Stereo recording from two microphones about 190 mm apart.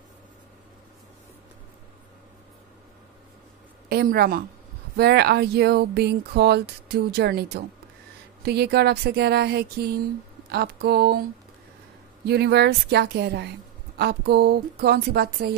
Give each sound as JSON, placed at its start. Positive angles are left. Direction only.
{"t": 3.9, "sound": "a woman's voice", "side_deg": -50}
{"t": 12.3, "sound": "speech", "side_deg": -60}